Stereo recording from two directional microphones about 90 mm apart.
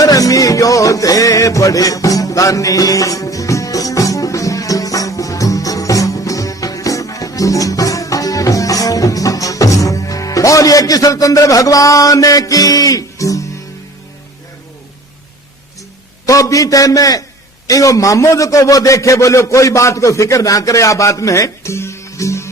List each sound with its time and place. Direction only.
0.0 s music: 40° left (ahead or behind)
16.2 s a man's voice: 40° left (ahead or behind)